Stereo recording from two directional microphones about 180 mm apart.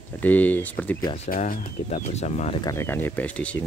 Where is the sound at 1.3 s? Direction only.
50° left (ahead or behind).